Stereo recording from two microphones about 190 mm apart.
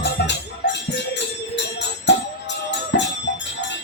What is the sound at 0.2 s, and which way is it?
Music, 60° left (ahead or behind).